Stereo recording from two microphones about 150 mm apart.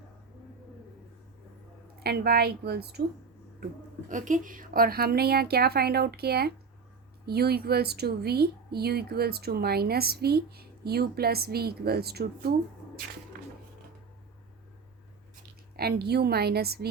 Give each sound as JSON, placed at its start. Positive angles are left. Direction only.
{"t": 2.0, "sound": "speech", "side_deg": -90}
{"t": 4.1, "sound": "speech", "side_deg": -60}
{"t": 13.3, "sound": "a sound", "side_deg": -70}
{"t": 15.7, "sound": "speech", "side_deg": -90}